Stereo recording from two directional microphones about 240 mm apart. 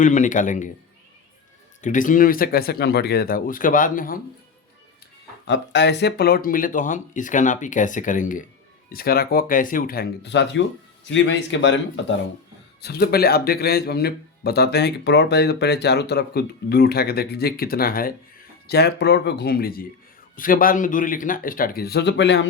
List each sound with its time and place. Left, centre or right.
0.0 s speech: left
1.8 s speech: left
5.5 s speech: left